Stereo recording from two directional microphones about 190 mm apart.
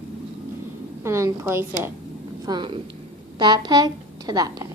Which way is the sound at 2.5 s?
25° right (ahead or behind).